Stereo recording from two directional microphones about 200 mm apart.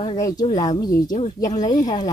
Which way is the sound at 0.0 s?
20° left (ahead or behind).